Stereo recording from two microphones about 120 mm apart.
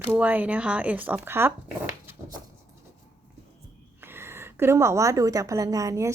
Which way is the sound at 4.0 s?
20° right (ahead or behind).